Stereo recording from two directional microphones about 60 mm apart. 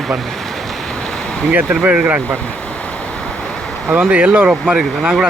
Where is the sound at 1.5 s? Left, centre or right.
Right.